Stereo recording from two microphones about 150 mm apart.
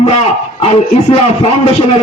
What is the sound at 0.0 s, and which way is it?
Speech, 40° left (ahead or behind).